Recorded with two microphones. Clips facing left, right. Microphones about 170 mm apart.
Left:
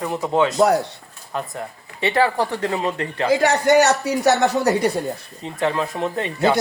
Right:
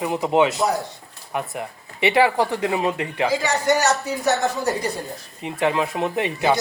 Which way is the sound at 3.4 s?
60° left (ahead or behind).